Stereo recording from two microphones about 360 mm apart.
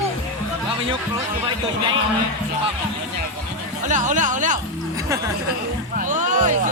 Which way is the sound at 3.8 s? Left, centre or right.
Right.